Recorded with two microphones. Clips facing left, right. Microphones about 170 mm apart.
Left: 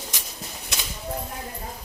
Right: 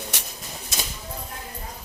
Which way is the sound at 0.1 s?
70° right (ahead or behind).